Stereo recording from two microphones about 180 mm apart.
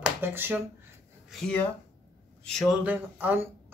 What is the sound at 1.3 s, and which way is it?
Speech, 5° left (ahead or behind).